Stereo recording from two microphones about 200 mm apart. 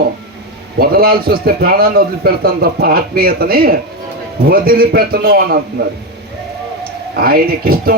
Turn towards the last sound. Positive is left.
turn(degrees=-50)  # may be behind; listen again after turning